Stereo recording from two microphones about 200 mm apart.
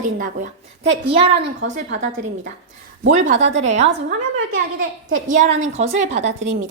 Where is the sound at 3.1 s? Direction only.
40° right (ahead or behind).